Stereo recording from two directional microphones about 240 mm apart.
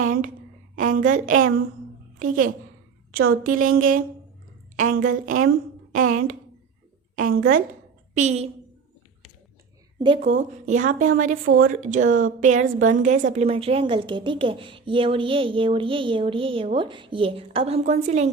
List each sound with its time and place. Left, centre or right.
0.0 s a woman's voice: right
8.1 s a woman's voice: right
10.2 s a woman's voice: right